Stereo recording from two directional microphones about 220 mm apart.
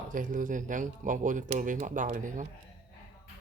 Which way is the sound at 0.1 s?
35° right (ahead or behind).